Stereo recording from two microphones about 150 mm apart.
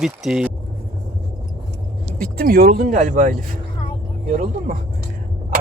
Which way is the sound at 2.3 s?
85° right.